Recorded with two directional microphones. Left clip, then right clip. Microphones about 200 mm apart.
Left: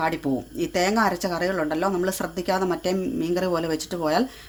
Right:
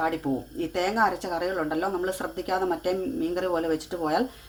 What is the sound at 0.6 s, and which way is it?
A woman's voice, 55° left (ahead or behind).